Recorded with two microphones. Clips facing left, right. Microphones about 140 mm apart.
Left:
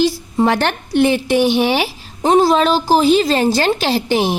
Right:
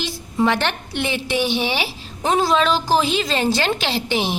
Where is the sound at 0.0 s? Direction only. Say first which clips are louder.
Left 6 dB; 40° left (ahead or behind).